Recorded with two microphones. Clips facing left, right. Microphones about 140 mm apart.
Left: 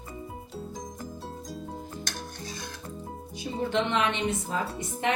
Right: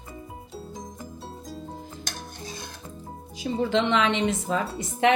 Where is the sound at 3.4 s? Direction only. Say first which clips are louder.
Right 4 dB; 90° right.